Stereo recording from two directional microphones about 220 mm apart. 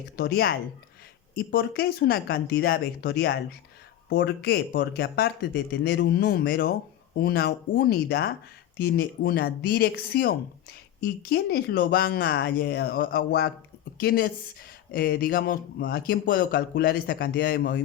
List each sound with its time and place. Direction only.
0.2 s speech: 45° left (ahead or behind)